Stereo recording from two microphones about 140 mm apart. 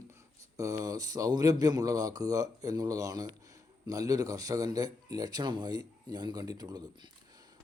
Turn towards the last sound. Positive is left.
turn(degrees=-30)  # may be behind; listen again after turning